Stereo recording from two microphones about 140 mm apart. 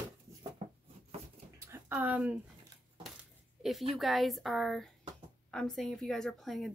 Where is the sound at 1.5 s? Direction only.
20° right (ahead or behind).